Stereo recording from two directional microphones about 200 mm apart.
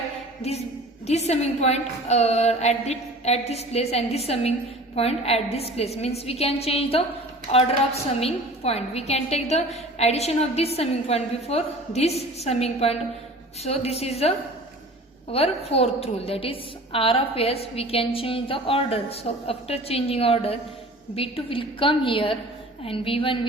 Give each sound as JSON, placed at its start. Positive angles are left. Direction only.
{"t": 0.4, "sound": "a woman's voice", "side_deg": 30}